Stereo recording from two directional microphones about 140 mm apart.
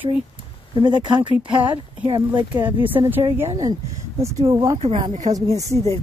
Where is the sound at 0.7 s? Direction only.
30° right (ahead or behind).